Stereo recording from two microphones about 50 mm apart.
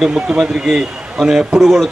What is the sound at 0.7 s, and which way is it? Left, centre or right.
A man's voice, centre.